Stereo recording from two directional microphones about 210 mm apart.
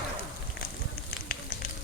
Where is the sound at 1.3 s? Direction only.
45° left (ahead or behind).